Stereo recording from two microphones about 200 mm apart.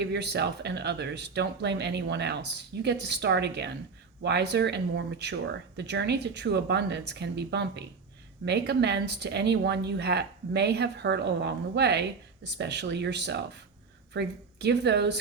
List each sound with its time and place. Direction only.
0.0 s a woman's voice: 55° right (ahead or behind)